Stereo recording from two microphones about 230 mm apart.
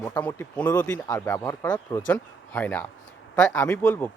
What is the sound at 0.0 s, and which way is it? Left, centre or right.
Speech, centre.